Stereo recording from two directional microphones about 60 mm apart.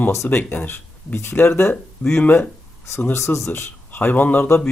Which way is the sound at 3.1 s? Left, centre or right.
Left.